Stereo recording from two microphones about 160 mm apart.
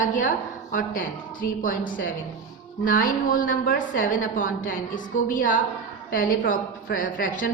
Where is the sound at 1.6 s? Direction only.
55° left (ahead or behind).